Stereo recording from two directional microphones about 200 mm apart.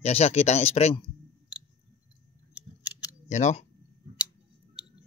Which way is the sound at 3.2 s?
35° left (ahead or behind).